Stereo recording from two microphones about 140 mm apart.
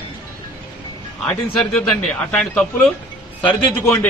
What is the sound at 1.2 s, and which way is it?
Speech, 5° left (ahead or behind).